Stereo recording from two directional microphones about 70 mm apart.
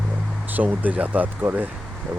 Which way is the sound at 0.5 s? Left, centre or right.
Right.